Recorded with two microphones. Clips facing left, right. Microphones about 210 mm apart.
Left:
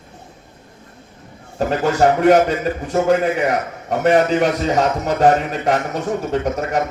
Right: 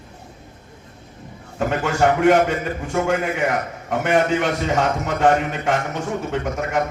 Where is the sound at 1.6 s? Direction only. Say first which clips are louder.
Left 3 dB; 35° left (ahead or behind).